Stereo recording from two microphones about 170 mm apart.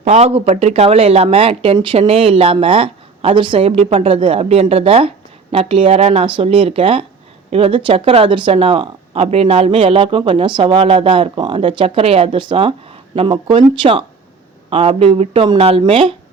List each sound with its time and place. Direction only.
0.0 s speech: 40° right (ahead or behind)
14.7 s speech: 35° right (ahead or behind)